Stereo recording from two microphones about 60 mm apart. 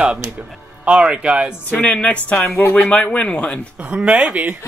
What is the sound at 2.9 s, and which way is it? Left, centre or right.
Speech, centre.